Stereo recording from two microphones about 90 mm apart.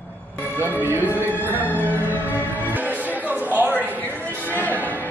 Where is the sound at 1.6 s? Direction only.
20° left (ahead or behind).